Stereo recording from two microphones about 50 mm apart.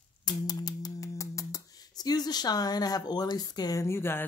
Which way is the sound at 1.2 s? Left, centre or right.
Left.